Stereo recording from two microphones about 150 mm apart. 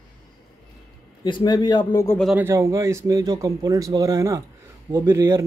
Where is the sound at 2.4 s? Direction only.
20° right (ahead or behind).